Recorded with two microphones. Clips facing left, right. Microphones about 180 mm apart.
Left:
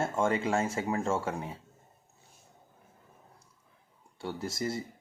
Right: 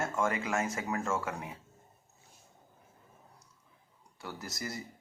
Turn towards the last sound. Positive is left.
turn(degrees=25)  # may be behind; listen again after turning